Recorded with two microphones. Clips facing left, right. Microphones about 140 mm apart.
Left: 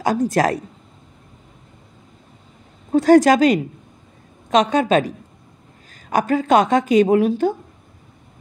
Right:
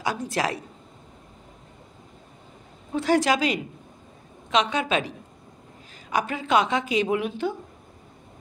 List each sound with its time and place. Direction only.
0.0 s a woman's voice: 45° left (ahead or behind)
2.9 s a woman's voice: 45° left (ahead or behind)